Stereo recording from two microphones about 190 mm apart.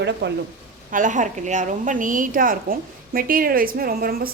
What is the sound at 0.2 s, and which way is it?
Speech, 70° right (ahead or behind).